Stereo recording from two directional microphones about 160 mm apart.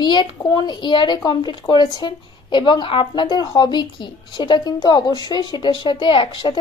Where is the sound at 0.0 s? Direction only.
25° left (ahead or behind).